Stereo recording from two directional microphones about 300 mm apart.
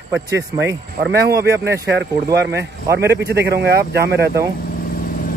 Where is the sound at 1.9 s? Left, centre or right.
Right.